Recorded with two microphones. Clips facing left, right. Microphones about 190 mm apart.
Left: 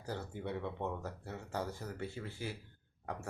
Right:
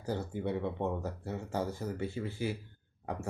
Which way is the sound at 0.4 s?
20° right (ahead or behind).